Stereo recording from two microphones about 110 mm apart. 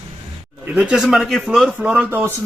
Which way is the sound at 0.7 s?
10° right (ahead or behind).